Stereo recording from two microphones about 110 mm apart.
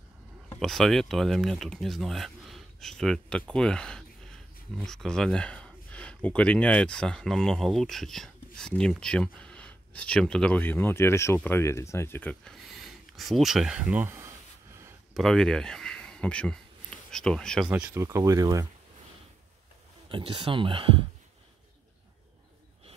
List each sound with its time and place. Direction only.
0.6 s speech: centre (ahead or behind)
12.6 s speech: centre (ahead or behind); by 14.2 s 20° right (ahead or behind)
15.1 s speech: 5° left (ahead or behind)
17.6 s speech: 10° right (ahead or behind)
17.9 s speech: 25° right (ahead or behind)
20.1 s speech: 50° right (ahead or behind)